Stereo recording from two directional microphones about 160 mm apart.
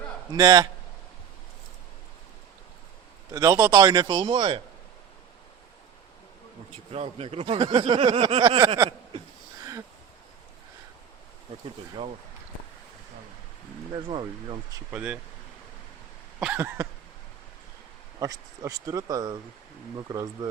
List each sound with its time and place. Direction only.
0.3 s a man's voice: 25° right (ahead or behind)
3.3 s a man's voice: 20° right (ahead or behind)
6.9 s speech: 40° right (ahead or behind)
12.0 s speech: 35° right (ahead or behind)
13.9 s a man's voice: 30° right (ahead or behind)
14.8 s a sound: 10° right (ahead or behind)
16.4 s a sound: 10° right (ahead or behind)
18.2 s a man's voice: 20° right (ahead or behind)